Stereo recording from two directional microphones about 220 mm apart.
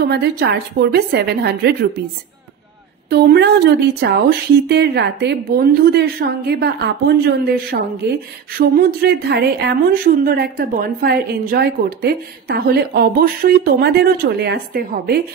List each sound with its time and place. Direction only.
0.0 s speech: 50° right (ahead or behind)
3.1 s speech: 50° right (ahead or behind)